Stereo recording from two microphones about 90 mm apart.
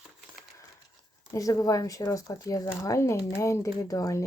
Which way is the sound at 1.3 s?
40° left (ahead or behind).